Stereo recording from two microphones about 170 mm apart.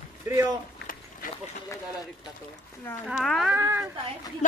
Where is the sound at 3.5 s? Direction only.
15° right (ahead or behind).